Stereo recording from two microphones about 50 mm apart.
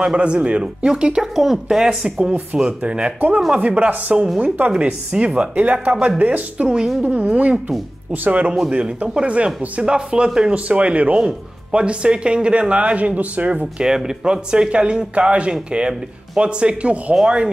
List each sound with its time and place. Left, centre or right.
0.0 s speech: right
5.1 s speech: right
13.7 s speech: centre